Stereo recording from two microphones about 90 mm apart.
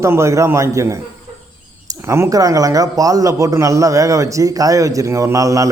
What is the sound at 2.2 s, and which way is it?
A man's voice, 40° right (ahead or behind).